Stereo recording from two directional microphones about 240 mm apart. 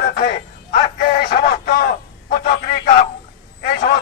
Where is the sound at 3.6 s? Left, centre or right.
Left.